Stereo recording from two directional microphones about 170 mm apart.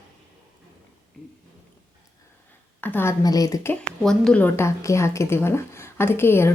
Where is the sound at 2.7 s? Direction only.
10° left (ahead or behind).